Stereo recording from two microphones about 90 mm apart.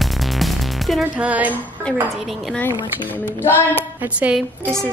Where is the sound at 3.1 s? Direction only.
25° left (ahead or behind).